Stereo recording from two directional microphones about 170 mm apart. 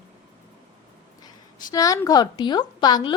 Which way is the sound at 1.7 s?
20° left (ahead or behind).